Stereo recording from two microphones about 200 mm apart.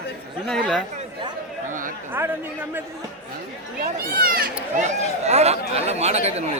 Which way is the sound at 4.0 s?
45° right (ahead or behind).